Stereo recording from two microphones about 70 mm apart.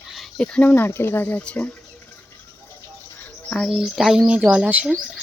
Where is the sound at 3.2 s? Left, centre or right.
Left.